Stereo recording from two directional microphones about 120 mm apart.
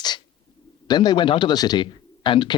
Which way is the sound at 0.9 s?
35° left (ahead or behind).